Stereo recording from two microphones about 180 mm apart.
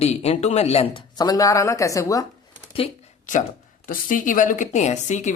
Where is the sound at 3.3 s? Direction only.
45° left (ahead or behind).